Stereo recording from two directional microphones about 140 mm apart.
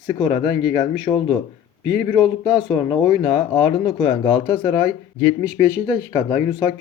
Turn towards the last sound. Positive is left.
turn(degrees=25)  # may be behind; listen again after turning